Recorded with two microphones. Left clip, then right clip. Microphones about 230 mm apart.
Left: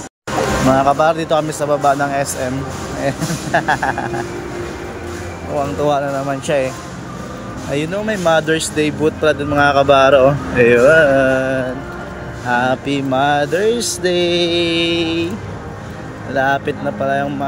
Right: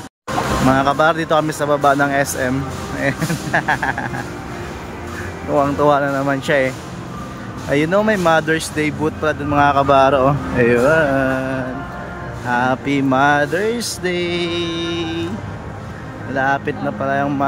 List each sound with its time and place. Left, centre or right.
0.7 s speech: centre
5.6 s speech: centre
7.7 s speech: centre
16.3 s speech: centre